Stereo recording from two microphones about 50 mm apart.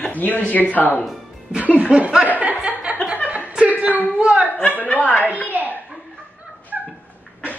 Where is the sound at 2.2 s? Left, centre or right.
Right.